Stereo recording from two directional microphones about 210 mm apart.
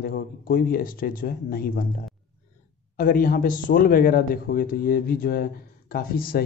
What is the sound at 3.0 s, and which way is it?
A man's voice, 40° left (ahead or behind).